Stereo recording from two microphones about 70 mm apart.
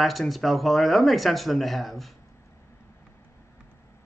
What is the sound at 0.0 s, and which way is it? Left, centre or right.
Speech, centre.